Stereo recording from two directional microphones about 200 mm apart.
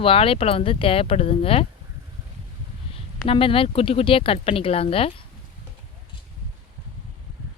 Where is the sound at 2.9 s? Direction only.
25° left (ahead or behind).